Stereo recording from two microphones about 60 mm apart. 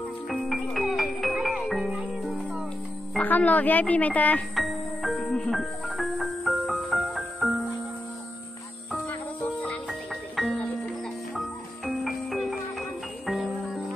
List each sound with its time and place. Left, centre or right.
0.3 s music: centre
3.2 s speech: left
4.6 s music: centre
5.2 s music: centre
5.9 s music: centre
9.8 s music: centre